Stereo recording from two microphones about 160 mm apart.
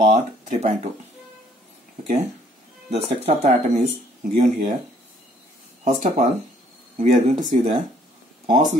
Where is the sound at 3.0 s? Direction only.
40° right (ahead or behind).